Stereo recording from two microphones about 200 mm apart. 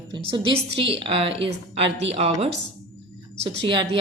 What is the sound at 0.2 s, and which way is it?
A woman's voice, 25° right (ahead or behind).